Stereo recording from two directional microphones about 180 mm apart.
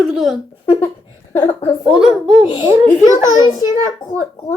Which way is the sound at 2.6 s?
15° right (ahead or behind).